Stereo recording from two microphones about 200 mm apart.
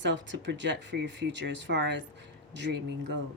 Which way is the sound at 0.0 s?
65° right (ahead or behind).